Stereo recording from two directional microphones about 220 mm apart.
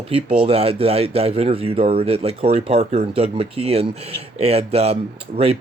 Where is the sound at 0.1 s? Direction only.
25° right (ahead or behind).